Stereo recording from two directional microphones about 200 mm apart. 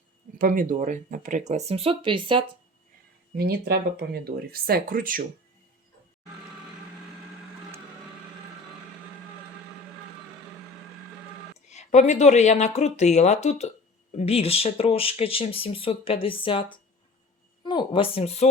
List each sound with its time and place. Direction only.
0.3 s speech: 45° right (ahead or behind); by 2.4 s 25° right (ahead or behind)
3.3 s speech: 50° right (ahead or behind)
11.7 s speech: 35° left (ahead or behind)